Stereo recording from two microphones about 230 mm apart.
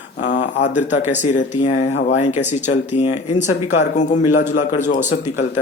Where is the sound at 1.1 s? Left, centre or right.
Left.